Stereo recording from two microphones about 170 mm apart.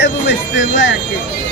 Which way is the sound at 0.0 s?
90° left.